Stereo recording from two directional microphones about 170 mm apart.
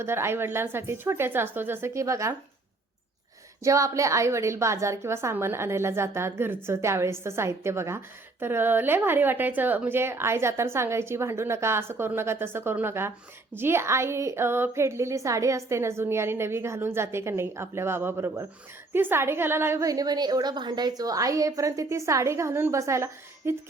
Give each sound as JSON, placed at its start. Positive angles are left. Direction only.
{"t": 0.0, "sound": "a woman's voice", "side_deg": -15}
{"t": 3.6, "sound": "a woman's voice", "side_deg": -20}